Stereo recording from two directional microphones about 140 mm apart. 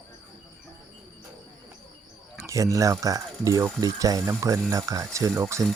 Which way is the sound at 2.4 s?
25° right (ahead or behind).